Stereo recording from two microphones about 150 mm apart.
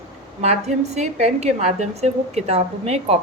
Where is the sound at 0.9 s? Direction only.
50° right (ahead or behind).